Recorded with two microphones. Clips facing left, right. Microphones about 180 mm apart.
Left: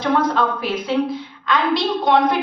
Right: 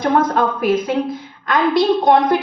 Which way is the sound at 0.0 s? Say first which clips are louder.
Right 2 dB; 50° right (ahead or behind).